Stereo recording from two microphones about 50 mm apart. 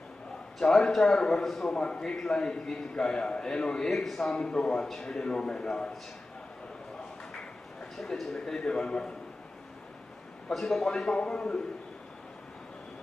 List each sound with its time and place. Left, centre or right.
0.6 s a man's voice: centre
1.7 s a man's voice: centre
7.9 s a man's voice: centre
10.5 s a man's voice: centre
11.0 s a man's voice: centre